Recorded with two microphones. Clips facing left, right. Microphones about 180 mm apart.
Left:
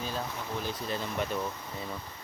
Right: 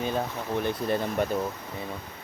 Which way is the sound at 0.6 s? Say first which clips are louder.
Right 9 dB; 60° right (ahead or behind).